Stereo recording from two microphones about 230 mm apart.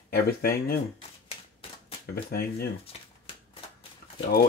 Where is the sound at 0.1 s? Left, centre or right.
Left.